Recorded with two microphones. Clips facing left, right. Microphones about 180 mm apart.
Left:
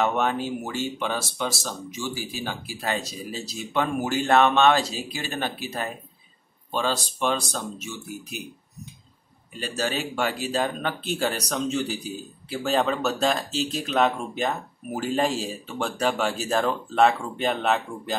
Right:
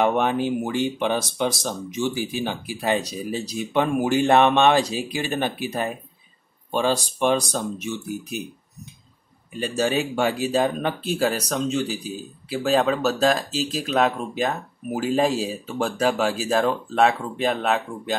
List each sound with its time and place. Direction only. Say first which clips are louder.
0.2 s speech: right 4 dB; 20° right (ahead or behind)
9.8 s speech: right 4 dB; 15° right (ahead or behind)
11.1 s speech: right 4 dB; 5° right (ahead or behind)